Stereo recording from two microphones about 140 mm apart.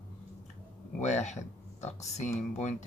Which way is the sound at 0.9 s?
55° left (ahead or behind).